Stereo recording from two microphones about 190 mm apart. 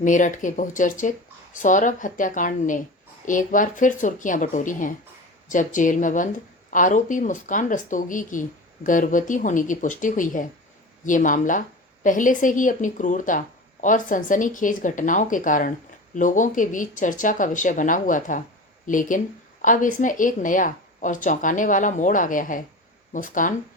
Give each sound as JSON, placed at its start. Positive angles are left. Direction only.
{"t": 0.0, "sound": "speech", "side_deg": 45}